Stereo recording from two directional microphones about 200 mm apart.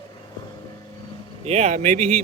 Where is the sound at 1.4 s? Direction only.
30° right (ahead or behind).